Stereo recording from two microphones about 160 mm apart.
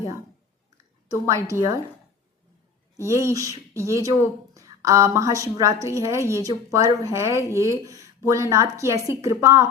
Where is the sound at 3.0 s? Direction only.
20° right (ahead or behind).